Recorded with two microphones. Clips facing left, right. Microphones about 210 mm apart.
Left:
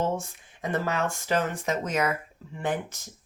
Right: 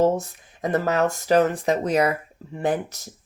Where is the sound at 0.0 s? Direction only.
40° right (ahead or behind).